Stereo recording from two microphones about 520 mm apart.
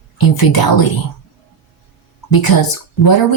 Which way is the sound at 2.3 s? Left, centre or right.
Left.